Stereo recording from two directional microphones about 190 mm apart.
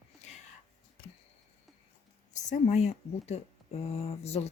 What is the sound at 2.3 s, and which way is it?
Speech, 40° left (ahead or behind).